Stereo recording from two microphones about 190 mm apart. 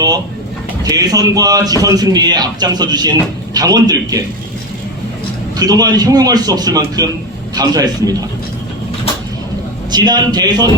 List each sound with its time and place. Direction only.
0.9 s a man's voice: 20° right (ahead or behind)
5.5 s a man's voice: 20° right (ahead or behind)
9.9 s a man's voice: 20° right (ahead or behind)